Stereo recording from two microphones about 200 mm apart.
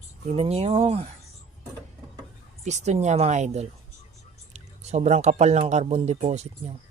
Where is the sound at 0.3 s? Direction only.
30° right (ahead or behind).